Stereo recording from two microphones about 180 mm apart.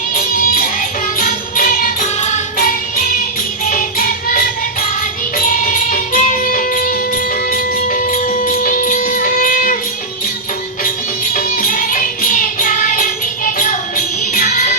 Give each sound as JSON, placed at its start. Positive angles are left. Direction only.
{"t": 0.3, "sound": "music", "side_deg": 50}
{"t": 5.6, "sound": "music", "side_deg": 50}
{"t": 11.3, "sound": "music", "side_deg": 50}